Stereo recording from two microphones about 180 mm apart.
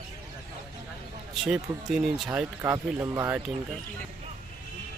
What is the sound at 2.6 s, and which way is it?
Speech, 15° right (ahead or behind).